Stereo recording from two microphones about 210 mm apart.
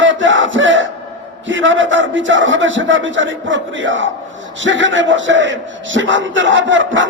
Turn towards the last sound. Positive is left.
turn(degrees=-65)  # may be behind; listen again after turning